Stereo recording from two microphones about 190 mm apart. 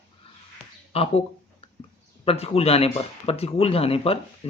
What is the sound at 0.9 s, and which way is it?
Speech, 30° left (ahead or behind).